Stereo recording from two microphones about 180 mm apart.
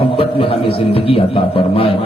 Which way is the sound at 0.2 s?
30° left (ahead or behind).